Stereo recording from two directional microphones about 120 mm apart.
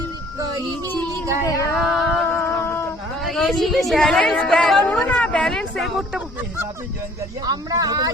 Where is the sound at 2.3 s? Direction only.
15° left (ahead or behind).